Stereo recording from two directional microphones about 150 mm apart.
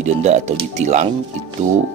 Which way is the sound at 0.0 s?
50° right (ahead or behind).